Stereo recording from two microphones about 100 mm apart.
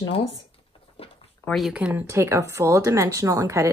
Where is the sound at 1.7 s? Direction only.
10° right (ahead or behind).